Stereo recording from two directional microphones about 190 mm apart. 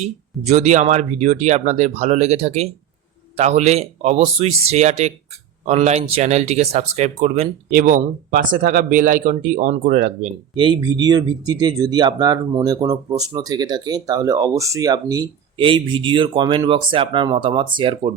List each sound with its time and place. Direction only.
0.0 s speech: 35° right (ahead or behind)
7.7 s speech: 45° right (ahead or behind)
10.6 s speech: 25° right (ahead or behind)